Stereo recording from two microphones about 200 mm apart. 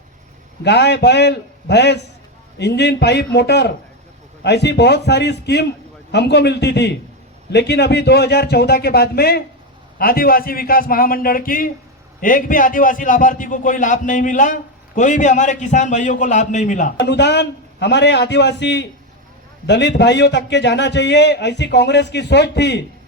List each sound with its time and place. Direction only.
0.6 s a man's voice: 60° left (ahead or behind); by 16.9 s 40° left (ahead or behind)
17.0 s a man's voice: 60° left (ahead or behind)